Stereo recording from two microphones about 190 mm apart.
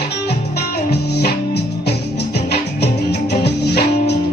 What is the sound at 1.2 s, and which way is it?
Music, 60° left (ahead or behind).